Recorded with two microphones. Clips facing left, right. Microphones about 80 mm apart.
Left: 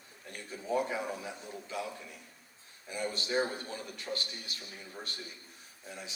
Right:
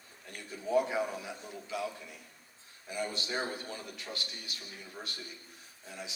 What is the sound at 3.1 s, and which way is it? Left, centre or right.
A man's voice, left.